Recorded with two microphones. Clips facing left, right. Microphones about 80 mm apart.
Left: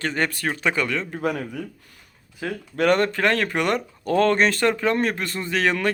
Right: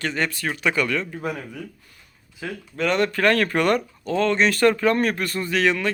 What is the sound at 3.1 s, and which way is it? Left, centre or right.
Speech, left.